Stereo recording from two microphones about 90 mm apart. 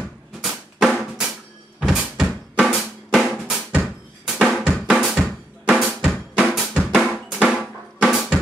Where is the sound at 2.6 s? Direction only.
Centre (ahead or behind).